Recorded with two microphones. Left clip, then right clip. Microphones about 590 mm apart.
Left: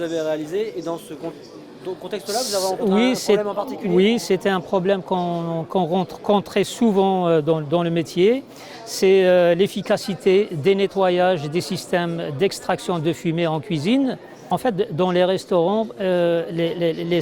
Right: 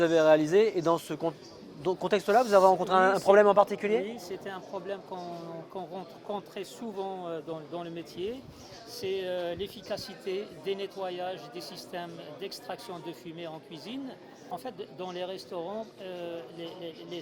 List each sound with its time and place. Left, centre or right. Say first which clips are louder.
0.0 s speech: right 1 dB; right
2.0 s speech: right 1 dB; right
4.0 s speech: left 19 dB; left